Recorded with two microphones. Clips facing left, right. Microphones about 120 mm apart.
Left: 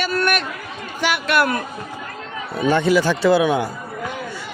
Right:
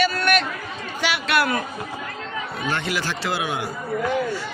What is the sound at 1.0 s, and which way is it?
Speech, 50° left (ahead or behind).